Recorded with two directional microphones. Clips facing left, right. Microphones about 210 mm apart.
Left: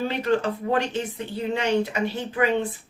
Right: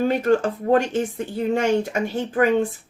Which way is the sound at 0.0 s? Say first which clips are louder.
Right 5 dB; 45° right (ahead or behind).